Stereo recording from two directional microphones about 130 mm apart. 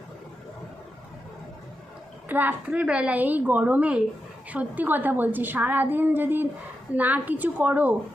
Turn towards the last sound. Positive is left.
turn(degrees=-15)  # may be behind; listen again after turning